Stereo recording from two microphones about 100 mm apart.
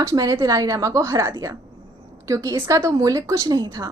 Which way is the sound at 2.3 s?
35° right (ahead or behind).